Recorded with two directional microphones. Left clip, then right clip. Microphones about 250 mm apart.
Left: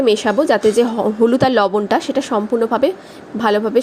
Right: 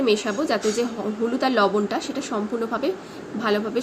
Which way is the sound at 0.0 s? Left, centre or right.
Left.